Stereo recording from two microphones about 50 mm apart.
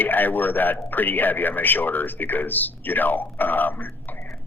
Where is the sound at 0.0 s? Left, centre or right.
Left.